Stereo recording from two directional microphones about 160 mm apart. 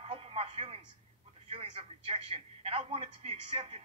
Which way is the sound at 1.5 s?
35° right (ahead or behind).